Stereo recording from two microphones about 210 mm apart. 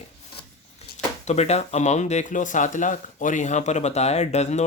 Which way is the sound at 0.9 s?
30° left (ahead or behind).